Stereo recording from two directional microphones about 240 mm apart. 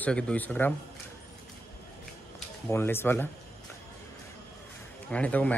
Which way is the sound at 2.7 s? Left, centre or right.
Centre.